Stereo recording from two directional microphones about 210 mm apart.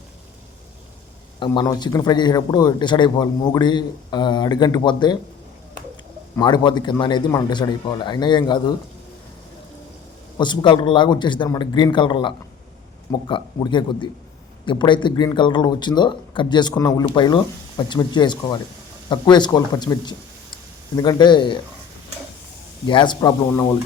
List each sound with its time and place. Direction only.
1.4 s speech: 20° left (ahead or behind)
6.3 s speech: 20° left (ahead or behind)
10.3 s speech: 20° left (ahead or behind)
22.9 s speech: 20° left (ahead or behind)